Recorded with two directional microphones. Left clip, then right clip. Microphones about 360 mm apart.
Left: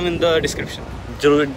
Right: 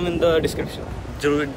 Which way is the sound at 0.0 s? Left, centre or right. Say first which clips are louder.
Left 2 dB; centre.